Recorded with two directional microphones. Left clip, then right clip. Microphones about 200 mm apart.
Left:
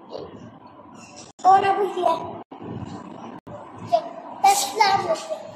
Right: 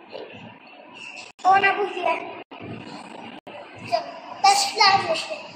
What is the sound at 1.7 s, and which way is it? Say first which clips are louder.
Child singing: left 2 dB; centre (ahead or behind).